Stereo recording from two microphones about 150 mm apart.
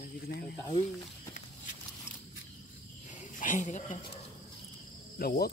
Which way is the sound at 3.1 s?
60° left (ahead or behind).